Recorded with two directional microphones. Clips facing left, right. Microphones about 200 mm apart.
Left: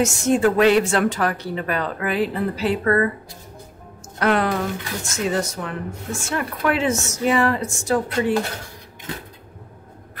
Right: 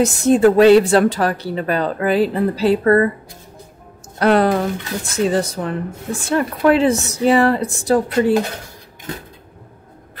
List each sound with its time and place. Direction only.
0.0 s speech: 35° right (ahead or behind)
4.2 s speech: 35° right (ahead or behind)